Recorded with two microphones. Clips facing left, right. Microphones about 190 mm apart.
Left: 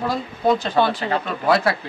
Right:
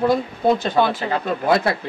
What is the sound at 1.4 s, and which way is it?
Speech, 20° right (ahead or behind).